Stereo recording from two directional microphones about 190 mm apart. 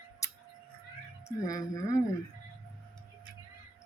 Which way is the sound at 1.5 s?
20° left (ahead or behind).